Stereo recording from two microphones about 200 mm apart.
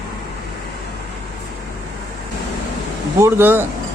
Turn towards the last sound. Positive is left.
turn(degrees=-10)  # may be behind; listen again after turning